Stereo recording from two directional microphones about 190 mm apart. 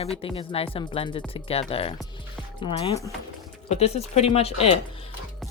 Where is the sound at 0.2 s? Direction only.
30° left (ahead or behind).